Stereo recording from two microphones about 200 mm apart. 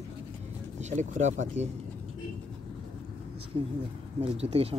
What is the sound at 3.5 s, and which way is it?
Speech, 25° right (ahead or behind).